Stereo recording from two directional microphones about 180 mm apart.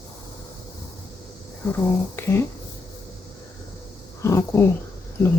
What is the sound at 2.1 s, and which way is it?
Speech, 15° left (ahead or behind).